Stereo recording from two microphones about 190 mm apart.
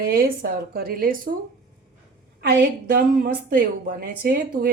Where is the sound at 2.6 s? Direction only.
50° right (ahead or behind).